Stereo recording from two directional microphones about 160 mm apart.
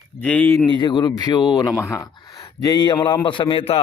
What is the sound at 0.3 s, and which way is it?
Speech, 10° left (ahead or behind).